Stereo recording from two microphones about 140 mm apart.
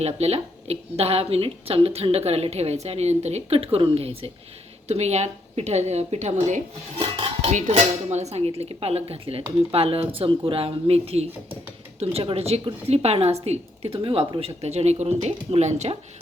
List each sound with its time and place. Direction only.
0.0 s a woman's voice: 50° right (ahead or behind)
7.0 s dishes: 45° right (ahead or behind)
7.7 s a woman's voice: 50° right (ahead or behind)